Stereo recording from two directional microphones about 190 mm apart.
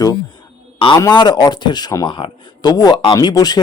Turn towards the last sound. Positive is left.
turn(degrees=20)  # may be behind; listen again after turning